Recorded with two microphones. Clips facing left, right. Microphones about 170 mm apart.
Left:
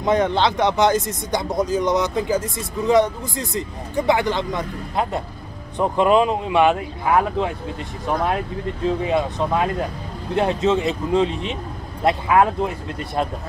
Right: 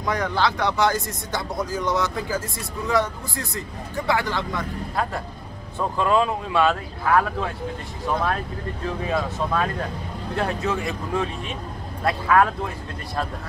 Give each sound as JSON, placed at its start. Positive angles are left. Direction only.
{"t": 0.0, "sound": "speech", "side_deg": 25}